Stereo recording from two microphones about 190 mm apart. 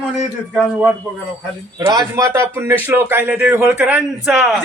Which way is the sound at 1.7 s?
20° right (ahead or behind).